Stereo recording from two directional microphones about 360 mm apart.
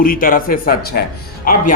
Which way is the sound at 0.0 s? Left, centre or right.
Left.